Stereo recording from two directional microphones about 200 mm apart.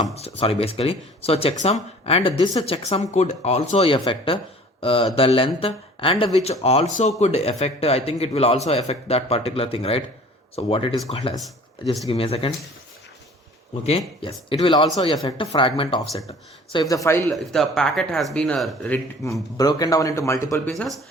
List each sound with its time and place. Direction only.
0.1 s speech: 30° left (ahead or behind)
13.8 s speech: 30° left (ahead or behind)
17.2 s speech: centre (ahead or behind)
19.5 s speech: 20° left (ahead or behind)